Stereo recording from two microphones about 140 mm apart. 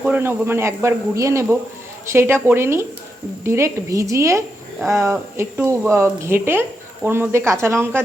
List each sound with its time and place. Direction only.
0.0 s a woman's voice: 15° right (ahead or behind)